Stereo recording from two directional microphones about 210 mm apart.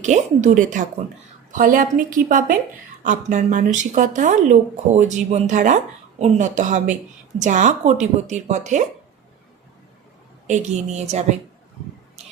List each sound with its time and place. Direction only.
0.0 s speech: 35° right (ahead or behind)
10.4 s speech: 35° right (ahead or behind)